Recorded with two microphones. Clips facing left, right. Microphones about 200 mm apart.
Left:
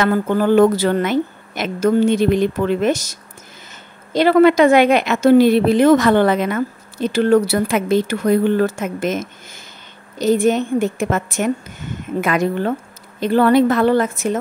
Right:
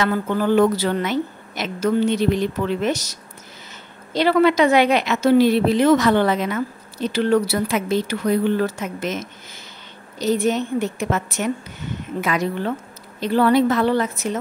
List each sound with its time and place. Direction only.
0.0 s a woman's voice: 50° left (ahead or behind)